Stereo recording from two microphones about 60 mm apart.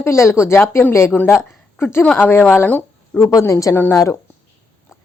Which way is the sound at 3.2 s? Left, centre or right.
Left.